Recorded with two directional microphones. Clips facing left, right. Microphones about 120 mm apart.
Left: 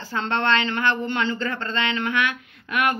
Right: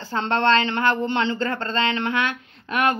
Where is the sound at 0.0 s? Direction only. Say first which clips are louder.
Right 3 dB; 30° right (ahead or behind).